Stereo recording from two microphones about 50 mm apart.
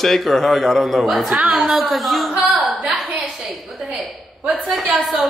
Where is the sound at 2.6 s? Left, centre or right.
Centre.